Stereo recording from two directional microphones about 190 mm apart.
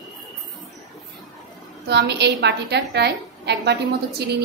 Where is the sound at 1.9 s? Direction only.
65° right (ahead or behind).